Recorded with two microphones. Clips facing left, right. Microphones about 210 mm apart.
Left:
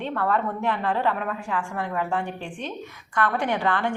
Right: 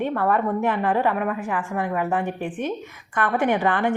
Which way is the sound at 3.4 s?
15° right (ahead or behind).